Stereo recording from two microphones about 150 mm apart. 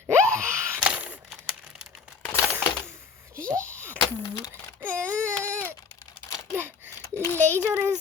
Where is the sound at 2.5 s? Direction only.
15° right (ahead or behind).